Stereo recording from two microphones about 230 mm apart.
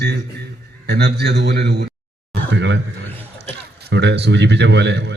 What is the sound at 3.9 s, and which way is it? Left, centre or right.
A man's voice, right.